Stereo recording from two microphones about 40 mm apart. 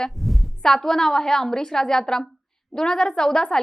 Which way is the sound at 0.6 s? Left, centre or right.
Centre.